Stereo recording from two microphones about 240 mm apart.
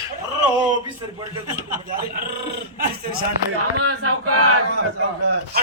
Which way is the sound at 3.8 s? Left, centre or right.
Right.